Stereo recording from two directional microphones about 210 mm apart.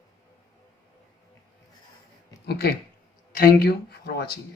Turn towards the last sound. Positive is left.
turn(degrees=50)  # may be behind; listen again after turning